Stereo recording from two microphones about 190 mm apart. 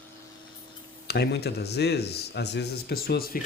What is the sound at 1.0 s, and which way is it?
A man's voice, 60° left (ahead or behind).